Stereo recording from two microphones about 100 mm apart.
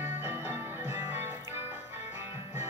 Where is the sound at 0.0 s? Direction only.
20° right (ahead or behind).